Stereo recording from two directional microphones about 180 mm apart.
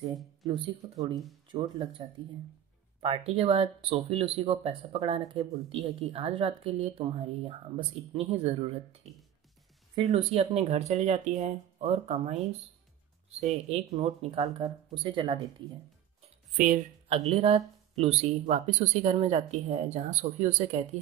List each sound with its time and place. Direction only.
0.1 s speech: centre (ahead or behind)
0.5 s speech: 20° right (ahead or behind); by 12.4 s 35° right (ahead or behind)
13.7 s speech: 30° right (ahead or behind)
16.5 s speech: 45° right (ahead or behind)